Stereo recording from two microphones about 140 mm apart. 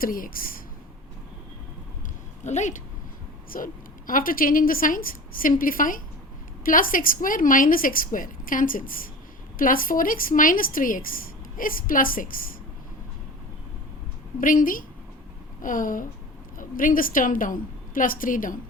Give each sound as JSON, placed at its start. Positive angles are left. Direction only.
{"t": 0.0, "sound": "speech", "side_deg": 90}
{"t": 2.4, "sound": "speech", "side_deg": 55}
{"t": 3.5, "sound": "a woman's voice", "side_deg": 80}
{"t": 14.4, "sound": "a woman's voice", "side_deg": 75}